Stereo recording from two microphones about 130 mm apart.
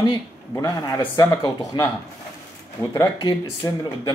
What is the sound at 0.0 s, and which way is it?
Speech, 30° left (ahead or behind).